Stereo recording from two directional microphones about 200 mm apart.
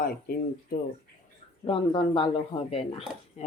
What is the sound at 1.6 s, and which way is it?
Speech, 25° left (ahead or behind).